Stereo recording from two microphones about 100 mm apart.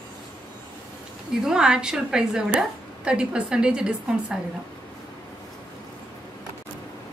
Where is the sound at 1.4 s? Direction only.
5° right (ahead or behind).